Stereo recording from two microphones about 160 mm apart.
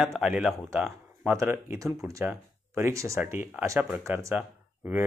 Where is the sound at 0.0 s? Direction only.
5° right (ahead or behind).